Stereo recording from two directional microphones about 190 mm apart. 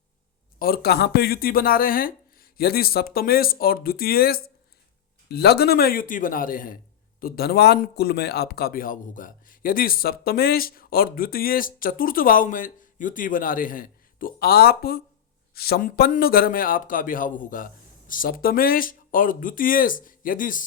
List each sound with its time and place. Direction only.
0.6 s a man's voice: 55° left (ahead or behind)